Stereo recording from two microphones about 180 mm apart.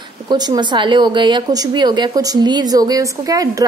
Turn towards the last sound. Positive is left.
turn(degrees=-20)  # may be behind; listen again after turning